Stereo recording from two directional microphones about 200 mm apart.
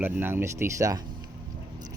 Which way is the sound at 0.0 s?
10° right (ahead or behind).